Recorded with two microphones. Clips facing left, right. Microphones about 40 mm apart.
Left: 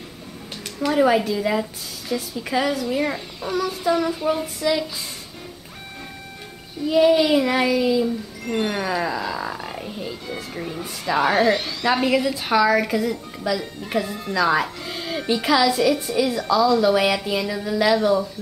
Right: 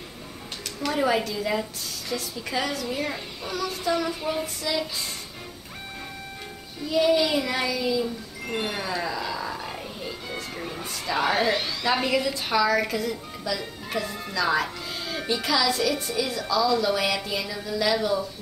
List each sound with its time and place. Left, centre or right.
0.7 s a woman's voice: centre
6.9 s a woman's voice: centre
8.5 s speech: centre
8.7 s a woman's voice: centre
15.7 s a woman's voice: centre